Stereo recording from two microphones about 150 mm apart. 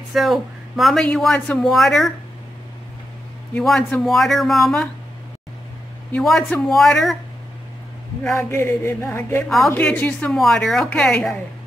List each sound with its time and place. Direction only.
0.1 s speech: centre (ahead or behind)
3.5 s speech: 5° left (ahead or behind)
6.1 s speech: 5° left (ahead or behind)
8.2 s a sound: 15° left (ahead or behind)
9.4 s speech: centre (ahead or behind)